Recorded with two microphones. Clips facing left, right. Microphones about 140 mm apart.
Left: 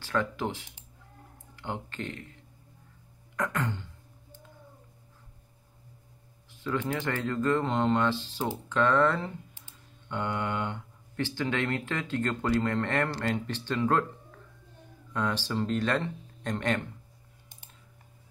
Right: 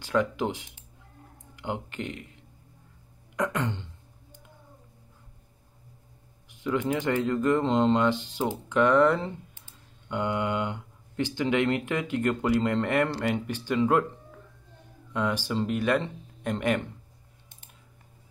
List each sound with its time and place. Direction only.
0.0 s speech: 15° right (ahead or behind)
3.3 s throat clearing: 20° right (ahead or behind)
6.5 s speech: 15° right (ahead or behind)
15.1 s speech: 10° right (ahead or behind)